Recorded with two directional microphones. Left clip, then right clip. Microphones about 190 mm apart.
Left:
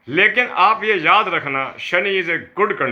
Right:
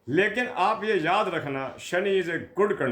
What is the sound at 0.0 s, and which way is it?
A man's voice, 25° right (ahead or behind).